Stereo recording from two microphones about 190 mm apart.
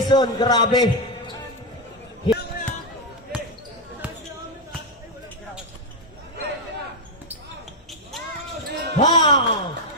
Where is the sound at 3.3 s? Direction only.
5° right (ahead or behind).